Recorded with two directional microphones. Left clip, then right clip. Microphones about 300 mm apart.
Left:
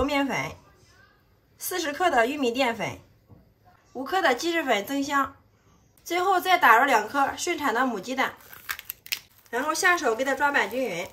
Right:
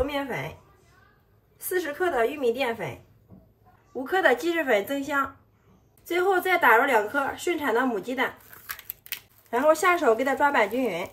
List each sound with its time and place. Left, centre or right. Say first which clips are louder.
0.0 s a sound: left 3 dB; centre
1.6 s a woman's voice: left 2 dB; centre
4.0 s a woman's voice: right 1 dB; centre